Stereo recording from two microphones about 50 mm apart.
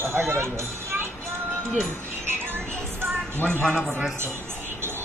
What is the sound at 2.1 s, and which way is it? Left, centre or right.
Music, right.